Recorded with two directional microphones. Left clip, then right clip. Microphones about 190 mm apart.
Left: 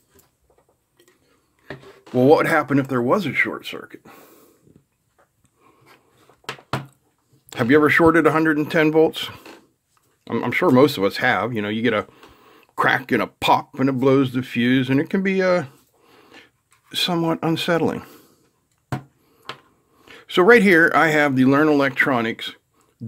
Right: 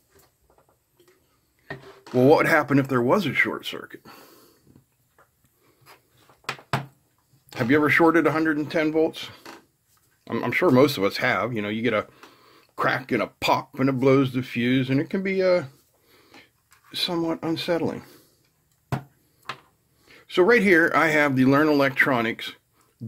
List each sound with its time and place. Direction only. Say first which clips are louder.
2.1 s speech: left 2 dB; 10° left (ahead or behind)
7.4 s speech: left 5 dB; 25° left (ahead or behind)
10.2 s speech: left 2 dB; 20° left (ahead or behind)
20.1 s speech: left 5 dB; 35° left (ahead or behind); by 23.0 s 15° left (ahead or behind)